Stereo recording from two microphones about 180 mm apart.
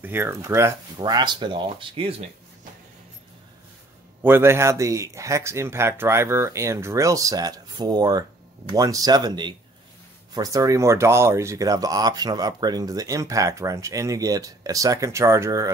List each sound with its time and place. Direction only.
0.0 s speech: 10° right (ahead or behind); by 2.2 s 30° right (ahead or behind)
4.2 s speech: 10° right (ahead or behind)